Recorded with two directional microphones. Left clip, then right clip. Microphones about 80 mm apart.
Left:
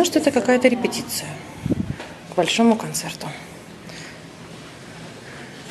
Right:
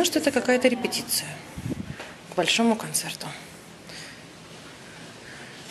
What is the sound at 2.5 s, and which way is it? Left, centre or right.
Speech, centre.